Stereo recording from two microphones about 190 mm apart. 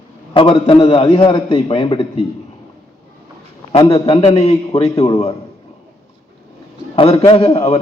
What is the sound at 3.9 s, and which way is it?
A man's voice, 30° left (ahead or behind).